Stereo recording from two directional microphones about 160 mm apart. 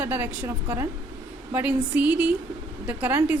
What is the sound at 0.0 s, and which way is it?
A woman's voice, 10° right (ahead or behind).